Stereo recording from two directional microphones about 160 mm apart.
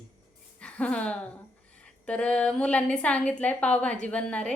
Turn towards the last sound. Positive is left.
turn(degrees=5)  # may be behind; listen again after turning